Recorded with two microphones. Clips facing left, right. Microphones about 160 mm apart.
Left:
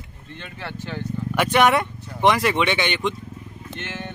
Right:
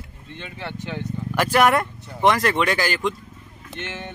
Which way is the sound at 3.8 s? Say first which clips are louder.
Right 1 dB; 20° right (ahead or behind).